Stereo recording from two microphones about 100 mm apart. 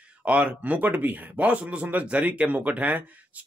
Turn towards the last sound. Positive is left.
turn(degrees=-15)  # may be behind; listen again after turning